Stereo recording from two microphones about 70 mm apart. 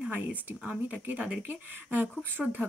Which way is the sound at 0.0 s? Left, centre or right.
Right.